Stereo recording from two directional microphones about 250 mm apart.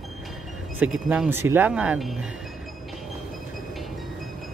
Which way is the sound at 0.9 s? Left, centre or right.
Centre.